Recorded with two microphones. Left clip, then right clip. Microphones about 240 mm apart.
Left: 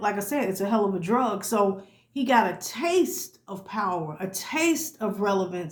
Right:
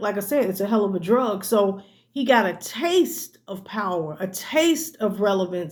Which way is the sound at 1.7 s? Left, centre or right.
Left.